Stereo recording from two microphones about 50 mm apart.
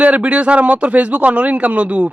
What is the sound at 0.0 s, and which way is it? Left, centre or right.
Speech, right.